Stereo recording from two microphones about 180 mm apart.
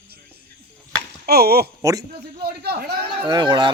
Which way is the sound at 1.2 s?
60° right (ahead or behind).